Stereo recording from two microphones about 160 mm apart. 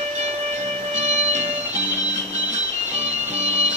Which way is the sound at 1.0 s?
45° right (ahead or behind).